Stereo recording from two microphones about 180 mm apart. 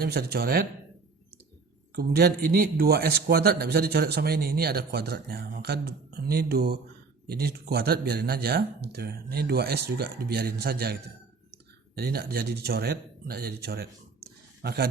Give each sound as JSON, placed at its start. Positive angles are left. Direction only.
{"t": 0.0, "sound": "a man's voice", "side_deg": -60}
{"t": 2.0, "sound": "a man's voice", "side_deg": -60}